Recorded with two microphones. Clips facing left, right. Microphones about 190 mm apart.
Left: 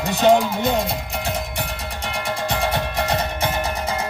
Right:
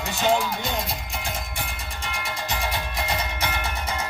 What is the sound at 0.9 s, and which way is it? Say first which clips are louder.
Music: left 7 dB; 65° left (ahead or behind).